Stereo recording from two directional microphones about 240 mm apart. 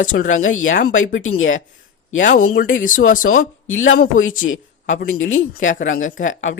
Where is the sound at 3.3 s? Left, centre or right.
Left.